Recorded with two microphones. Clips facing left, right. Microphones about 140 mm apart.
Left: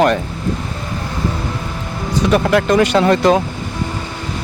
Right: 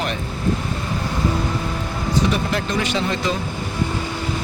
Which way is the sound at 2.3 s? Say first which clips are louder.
Left 9 dB; 75° left (ahead or behind).